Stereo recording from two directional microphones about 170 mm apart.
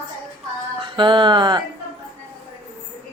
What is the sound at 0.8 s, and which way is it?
Speech, 30° right (ahead or behind).